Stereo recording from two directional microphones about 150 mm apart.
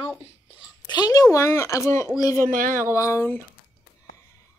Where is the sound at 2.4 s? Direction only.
65° right (ahead or behind).